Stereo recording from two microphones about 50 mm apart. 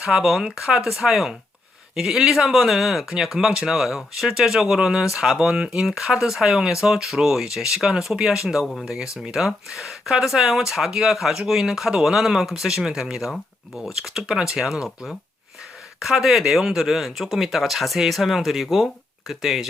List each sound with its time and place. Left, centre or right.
0.0 s speech: centre
14.8 s speech: centre